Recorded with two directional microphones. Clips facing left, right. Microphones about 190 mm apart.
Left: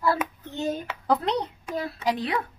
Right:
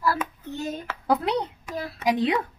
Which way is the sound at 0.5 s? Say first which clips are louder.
Left 3 dB; 25° left (ahead or behind).